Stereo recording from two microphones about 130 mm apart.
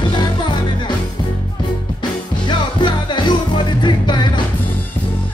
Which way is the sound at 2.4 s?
35° left (ahead or behind).